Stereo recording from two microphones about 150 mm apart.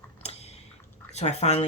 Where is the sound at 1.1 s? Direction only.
45° left (ahead or behind).